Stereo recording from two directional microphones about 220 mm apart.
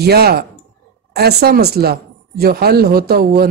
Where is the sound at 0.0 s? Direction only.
45° right (ahead or behind).